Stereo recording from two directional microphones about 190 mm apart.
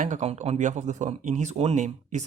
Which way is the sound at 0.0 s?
40° right (ahead or behind).